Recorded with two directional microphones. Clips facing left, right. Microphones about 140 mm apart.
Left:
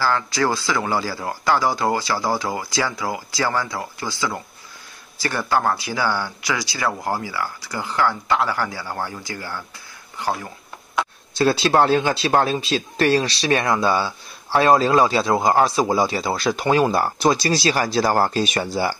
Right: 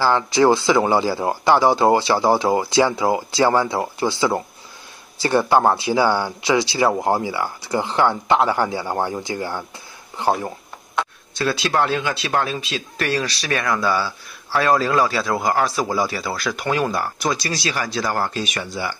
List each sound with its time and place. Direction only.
0.0 s speech: 20° right (ahead or behind)
11.3 s speech: 30° left (ahead or behind)